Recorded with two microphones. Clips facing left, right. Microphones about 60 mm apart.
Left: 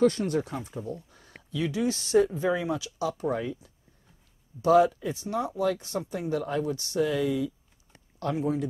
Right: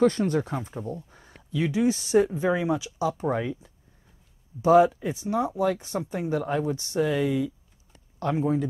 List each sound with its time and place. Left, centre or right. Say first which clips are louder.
0.0 s speech: right 2 dB; right